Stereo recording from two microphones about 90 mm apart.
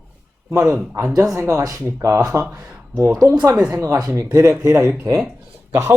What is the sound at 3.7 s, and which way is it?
A man's voice, 40° right (ahead or behind).